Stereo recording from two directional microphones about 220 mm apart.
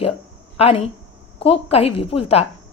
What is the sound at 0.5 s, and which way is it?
Speech, 30° left (ahead or behind).